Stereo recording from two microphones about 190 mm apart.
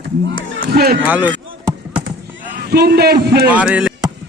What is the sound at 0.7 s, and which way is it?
Speech, 55° right (ahead or behind).